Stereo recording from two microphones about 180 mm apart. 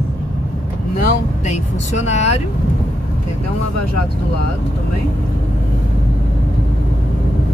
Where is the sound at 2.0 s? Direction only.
40° left (ahead or behind).